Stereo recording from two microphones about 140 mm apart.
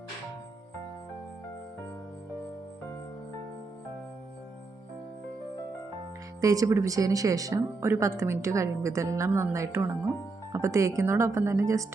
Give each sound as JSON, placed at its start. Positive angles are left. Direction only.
{"t": 6.4, "sound": "speech", "side_deg": -25}